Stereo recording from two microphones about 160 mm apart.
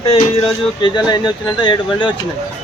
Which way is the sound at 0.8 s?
25° left (ahead or behind).